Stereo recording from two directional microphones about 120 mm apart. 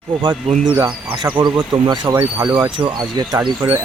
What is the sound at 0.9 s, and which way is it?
Speech, 40° right (ahead or behind).